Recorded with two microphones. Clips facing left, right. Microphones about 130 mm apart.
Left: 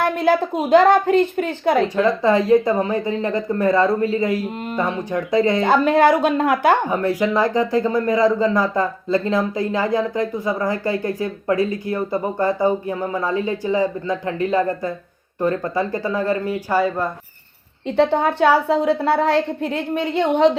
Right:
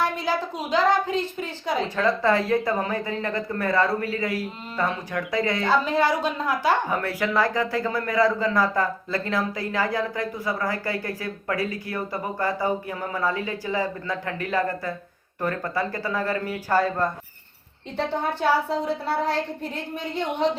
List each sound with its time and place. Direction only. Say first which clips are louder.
0.0 s a woman's voice: left 7 dB; 55° left (ahead or behind)
2.0 s speech: left 5 dB; 15° left (ahead or behind)
5.6 s a woman's voice: left 6 dB; 60° left (ahead or behind)
6.8 s speech: left 6 dB; 20° left (ahead or behind)
16.7 s speech: left 2 dB; 10° left (ahead or behind)
17.9 s a woman's voice: left 9 dB; 70° left (ahead or behind)